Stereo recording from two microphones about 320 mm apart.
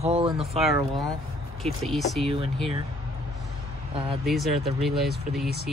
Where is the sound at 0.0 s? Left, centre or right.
Centre.